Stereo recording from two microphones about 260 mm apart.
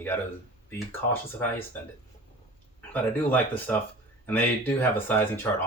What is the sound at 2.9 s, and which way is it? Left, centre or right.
Speech, centre.